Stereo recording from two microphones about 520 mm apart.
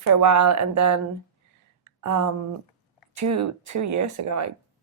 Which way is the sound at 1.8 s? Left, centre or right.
Right.